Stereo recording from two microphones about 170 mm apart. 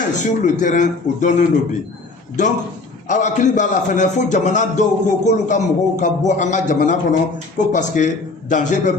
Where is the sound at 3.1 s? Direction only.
45° left (ahead or behind).